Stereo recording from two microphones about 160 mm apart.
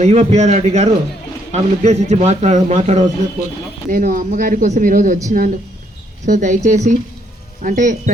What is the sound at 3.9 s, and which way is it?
A man's voice, 60° right (ahead or behind).